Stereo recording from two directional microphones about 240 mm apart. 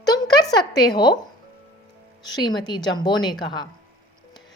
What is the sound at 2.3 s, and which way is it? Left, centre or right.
A woman's voice, centre.